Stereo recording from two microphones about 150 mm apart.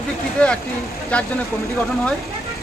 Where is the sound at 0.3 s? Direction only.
5° left (ahead or behind).